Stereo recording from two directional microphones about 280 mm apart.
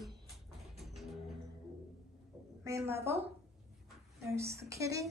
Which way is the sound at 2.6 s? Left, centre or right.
Centre.